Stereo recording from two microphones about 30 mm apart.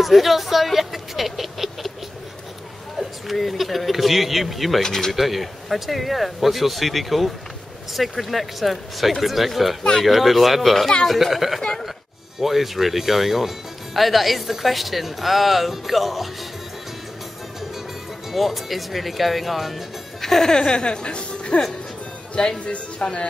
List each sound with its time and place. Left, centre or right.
0.0 s speech: centre
3.3 s speech: centre
4.8 s speech: centre
5.1 s speech: centre
18.3 s speech: centre
20.2 s speech: centre
20.5 s a woman's voice: left
23.0 s speech: left